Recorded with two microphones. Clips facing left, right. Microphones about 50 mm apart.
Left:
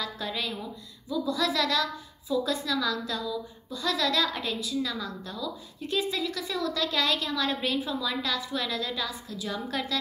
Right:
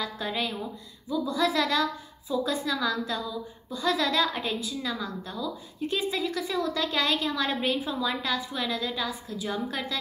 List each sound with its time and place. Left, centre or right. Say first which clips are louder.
0.0 s a woman's voice: right 2 dB; centre